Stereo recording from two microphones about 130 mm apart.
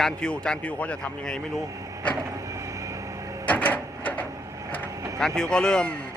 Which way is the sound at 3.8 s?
25° right (ahead or behind).